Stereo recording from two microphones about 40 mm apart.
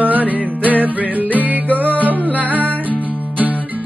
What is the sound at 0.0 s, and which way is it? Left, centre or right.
Music, right.